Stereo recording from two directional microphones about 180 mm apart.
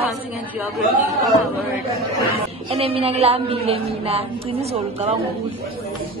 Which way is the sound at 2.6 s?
30° right (ahead or behind).